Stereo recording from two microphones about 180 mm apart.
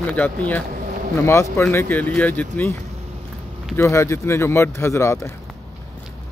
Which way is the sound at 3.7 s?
15° left (ahead or behind).